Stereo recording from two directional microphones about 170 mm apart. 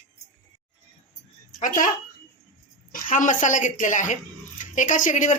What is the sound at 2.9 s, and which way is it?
Speech, 50° left (ahead or behind).